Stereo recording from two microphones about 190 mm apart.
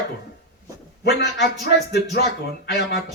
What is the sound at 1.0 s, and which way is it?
Speech, 60° left (ahead or behind).